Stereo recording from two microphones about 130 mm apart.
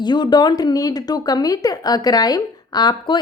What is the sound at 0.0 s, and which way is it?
Speech, 35° left (ahead or behind).